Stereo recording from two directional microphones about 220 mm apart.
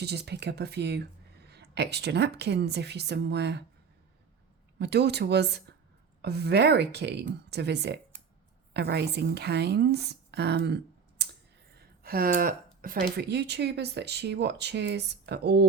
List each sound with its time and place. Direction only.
0.0 s speech: 50° right (ahead or behind)
4.8 s a woman's voice: 50° right (ahead or behind)
11.8 s a sound: 45° right (ahead or behind)
12.8 s speech: 45° right (ahead or behind)